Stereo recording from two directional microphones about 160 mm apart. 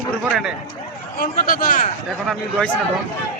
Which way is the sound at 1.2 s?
65° left (ahead or behind).